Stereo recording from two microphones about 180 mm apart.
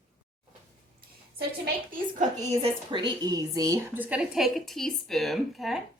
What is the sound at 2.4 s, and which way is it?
A woman's voice, 30° right (ahead or behind).